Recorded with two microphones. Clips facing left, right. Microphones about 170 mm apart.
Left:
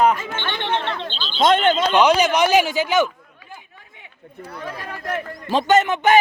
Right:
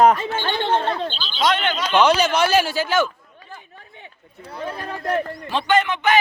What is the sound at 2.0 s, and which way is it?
A man's voice, 15° left (ahead or behind).